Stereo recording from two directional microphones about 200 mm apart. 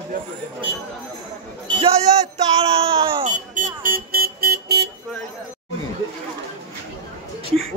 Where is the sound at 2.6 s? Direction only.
30° right (ahead or behind).